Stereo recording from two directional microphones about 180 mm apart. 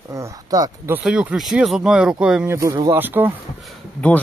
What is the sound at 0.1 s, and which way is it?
Speech, 20° right (ahead or behind).